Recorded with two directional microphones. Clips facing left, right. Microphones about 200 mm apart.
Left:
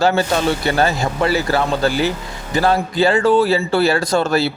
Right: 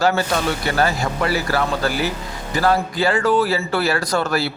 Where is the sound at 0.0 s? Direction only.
25° left (ahead or behind).